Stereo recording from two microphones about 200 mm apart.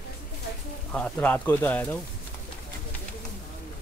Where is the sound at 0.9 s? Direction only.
5° left (ahead or behind).